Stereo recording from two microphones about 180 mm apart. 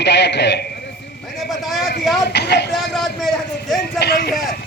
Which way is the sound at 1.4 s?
Centre (ahead or behind).